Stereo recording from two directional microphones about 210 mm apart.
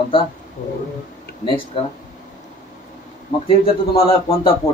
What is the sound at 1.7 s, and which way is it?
Speech, 25° left (ahead or behind).